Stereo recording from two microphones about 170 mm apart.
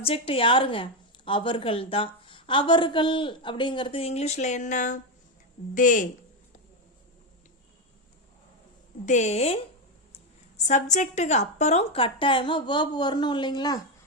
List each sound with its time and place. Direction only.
0.0 s a woman's voice: 35° left (ahead or behind); by 6.1 s 50° left (ahead or behind)
9.0 s a woman's voice: 45° left (ahead or behind)
10.6 s a woman's voice: 45° left (ahead or behind); by 13.8 s 25° left (ahead or behind)